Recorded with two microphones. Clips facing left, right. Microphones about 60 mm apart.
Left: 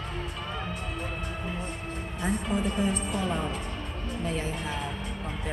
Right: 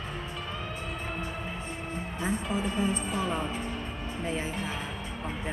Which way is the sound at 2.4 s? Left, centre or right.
Centre.